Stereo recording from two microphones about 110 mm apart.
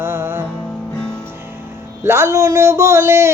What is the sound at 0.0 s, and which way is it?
Music, 25° right (ahead or behind).